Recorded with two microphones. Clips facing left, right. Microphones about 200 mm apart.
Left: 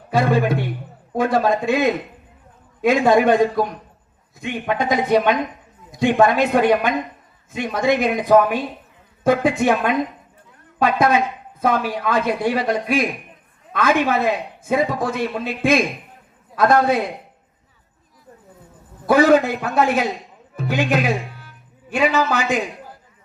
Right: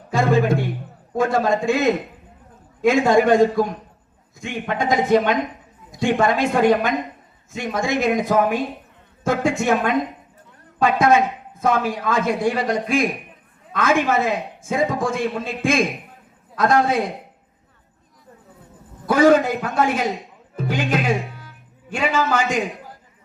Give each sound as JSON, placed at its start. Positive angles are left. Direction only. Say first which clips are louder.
{"t": 0.2, "sound": "a man's voice", "louder": "even", "side_deg": -50}
{"t": 2.9, "sound": "speech", "louder": "left 1 dB", "side_deg": -45}
{"t": 4.7, "sound": "a man's voice", "louder": "even", "side_deg": -50}
{"t": 19.1, "sound": "speech", "louder": "left 1 dB", "side_deg": -45}
{"t": 22.3, "sound": "speech", "louder": "even", "side_deg": -45}